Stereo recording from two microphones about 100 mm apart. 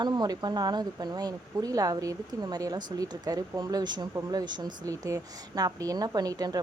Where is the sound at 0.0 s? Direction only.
45° right (ahead or behind).